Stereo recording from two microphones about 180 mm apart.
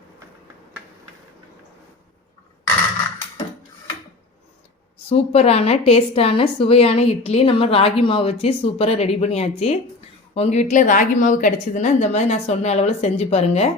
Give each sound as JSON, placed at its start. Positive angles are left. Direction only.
{"t": 5.0, "sound": "a woman's voice", "side_deg": 35}